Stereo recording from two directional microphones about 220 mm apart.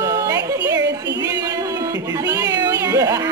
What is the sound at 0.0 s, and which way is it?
Music, 15° right (ahead or behind).